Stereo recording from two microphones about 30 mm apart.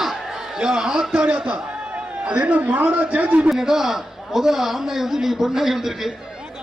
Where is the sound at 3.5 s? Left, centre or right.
Centre.